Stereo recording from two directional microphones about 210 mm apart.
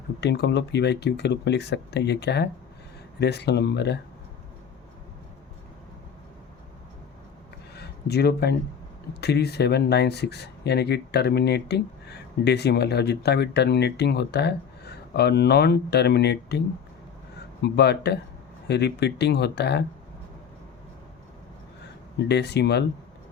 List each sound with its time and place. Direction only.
0.2 s speech: 55° left (ahead or behind)
7.8 s a sound: 50° left (ahead or behind)
9.2 s speech: 50° left (ahead or behind)
22.2 s speech: 55° left (ahead or behind)